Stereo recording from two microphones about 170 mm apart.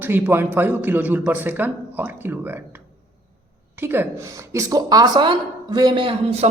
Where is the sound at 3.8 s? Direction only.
15° right (ahead or behind).